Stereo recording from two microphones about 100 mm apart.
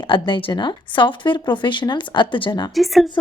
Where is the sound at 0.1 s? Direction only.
60° left (ahead or behind).